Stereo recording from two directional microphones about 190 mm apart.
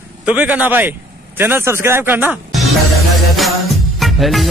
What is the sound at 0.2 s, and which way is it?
Speech, 10° right (ahead or behind).